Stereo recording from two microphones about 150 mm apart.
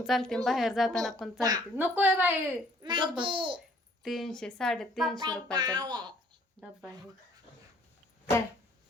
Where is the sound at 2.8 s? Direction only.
30° right (ahead or behind).